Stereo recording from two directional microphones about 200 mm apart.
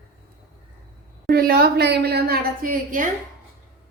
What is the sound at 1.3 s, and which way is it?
A woman's voice, 50° right (ahead or behind).